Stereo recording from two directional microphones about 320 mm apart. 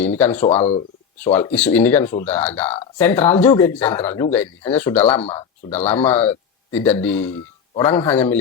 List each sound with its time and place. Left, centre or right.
0.0 s speech: centre
0.6 s speech: centre
1.2 s speech: centre